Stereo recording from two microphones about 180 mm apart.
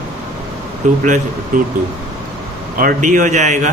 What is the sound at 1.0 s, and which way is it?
Speech, 45° right (ahead or behind).